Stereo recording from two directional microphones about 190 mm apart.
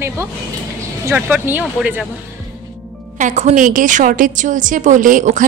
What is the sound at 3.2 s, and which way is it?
A woman's voice, 35° right (ahead or behind).